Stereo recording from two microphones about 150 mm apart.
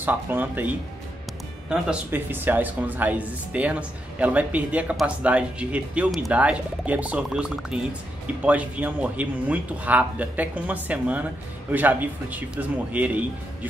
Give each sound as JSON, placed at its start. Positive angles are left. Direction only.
{"t": 0.0, "sound": "speech", "side_deg": -10}